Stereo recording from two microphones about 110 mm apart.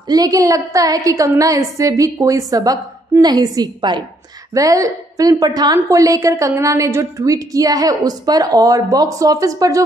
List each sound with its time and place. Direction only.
0.1 s a woman's voice: 35° right (ahead or behind)